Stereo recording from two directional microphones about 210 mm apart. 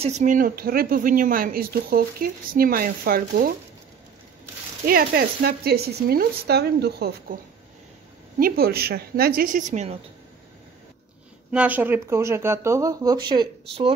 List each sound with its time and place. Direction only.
0.0 s speech: 35° right (ahead or behind)
4.8 s speech: 45° right (ahead or behind)
8.4 s speech: 45° right (ahead or behind)
11.5 s speech: 5° right (ahead or behind); by 13.9 s 25° right (ahead or behind)